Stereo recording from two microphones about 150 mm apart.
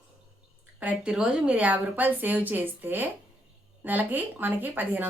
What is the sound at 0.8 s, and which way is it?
A woman's voice, 5° right (ahead or behind).